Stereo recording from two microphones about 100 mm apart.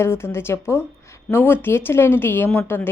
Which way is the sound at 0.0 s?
25° left (ahead or behind).